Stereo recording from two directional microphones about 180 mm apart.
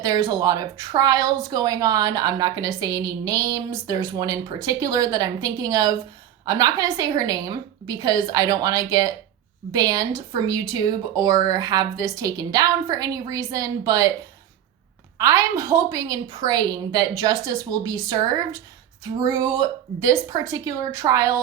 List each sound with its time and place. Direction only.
0.0 s speech: 20° right (ahead or behind)
15.2 s a woman's voice: 20° right (ahead or behind)